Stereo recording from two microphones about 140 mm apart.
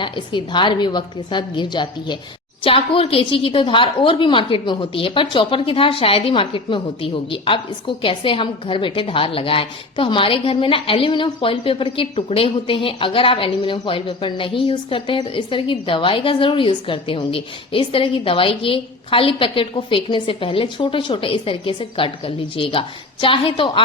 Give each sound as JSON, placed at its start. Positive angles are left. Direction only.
{"t": 0.0, "sound": "a woman's voice", "side_deg": 35}